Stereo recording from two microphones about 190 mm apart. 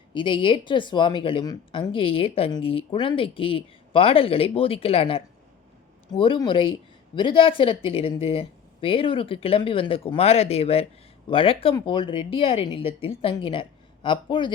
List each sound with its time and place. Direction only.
0.1 s speech: 25° left (ahead or behind)